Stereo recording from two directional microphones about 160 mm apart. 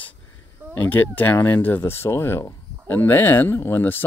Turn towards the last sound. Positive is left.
turn(degrees=15)  # may be behind; listen again after turning